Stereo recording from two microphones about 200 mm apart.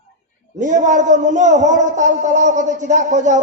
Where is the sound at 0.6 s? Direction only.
40° right (ahead or behind).